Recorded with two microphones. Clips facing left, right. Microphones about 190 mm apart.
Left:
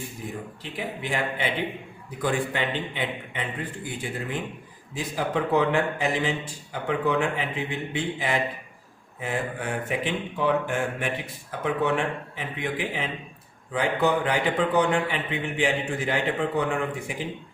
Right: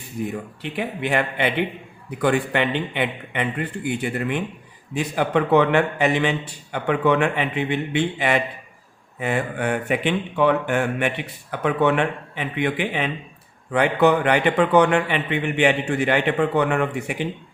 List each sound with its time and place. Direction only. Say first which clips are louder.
0.6 s speech: right 7 dB; 65° right (ahead or behind)